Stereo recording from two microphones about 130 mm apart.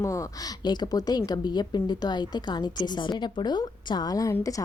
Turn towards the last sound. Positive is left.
turn(degrees=25)  # may be behind; listen again after turning